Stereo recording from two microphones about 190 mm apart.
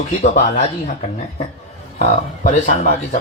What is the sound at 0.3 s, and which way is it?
Speech, 55° left (ahead or behind).